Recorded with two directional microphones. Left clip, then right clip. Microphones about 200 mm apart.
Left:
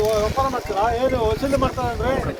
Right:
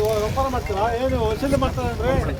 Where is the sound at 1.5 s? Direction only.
20° right (ahead or behind).